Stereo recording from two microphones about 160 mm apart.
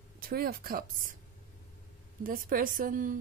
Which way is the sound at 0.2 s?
70° right (ahead or behind).